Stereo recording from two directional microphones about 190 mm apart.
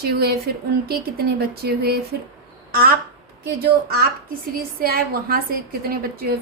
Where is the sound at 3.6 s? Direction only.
55° right (ahead or behind).